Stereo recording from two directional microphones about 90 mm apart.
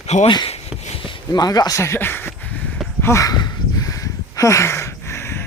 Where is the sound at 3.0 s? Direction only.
35° left (ahead or behind).